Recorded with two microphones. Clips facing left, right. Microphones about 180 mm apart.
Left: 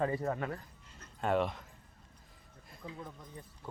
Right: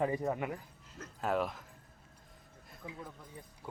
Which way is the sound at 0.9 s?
Centre (ahead or behind).